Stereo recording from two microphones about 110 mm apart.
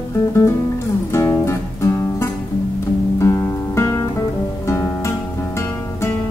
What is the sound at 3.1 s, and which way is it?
Guitar, 25° left (ahead or behind).